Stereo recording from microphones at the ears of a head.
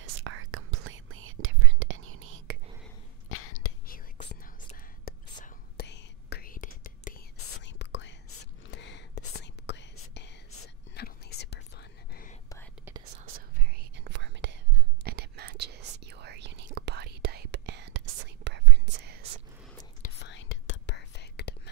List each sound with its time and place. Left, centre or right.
0.0 s whispering: right
3.3 s whispering: left
5.8 s whispering: left
12.8 s whispering: right
20.0 s whispering: left